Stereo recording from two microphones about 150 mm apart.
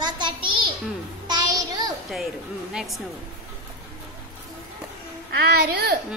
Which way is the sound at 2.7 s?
5° right (ahead or behind).